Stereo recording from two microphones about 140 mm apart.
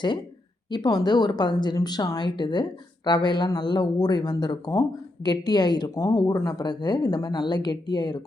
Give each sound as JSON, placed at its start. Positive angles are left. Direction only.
{"t": 0.7, "sound": "speech", "side_deg": 30}